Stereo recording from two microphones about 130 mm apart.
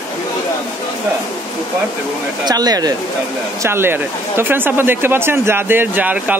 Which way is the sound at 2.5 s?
30° right (ahead or behind).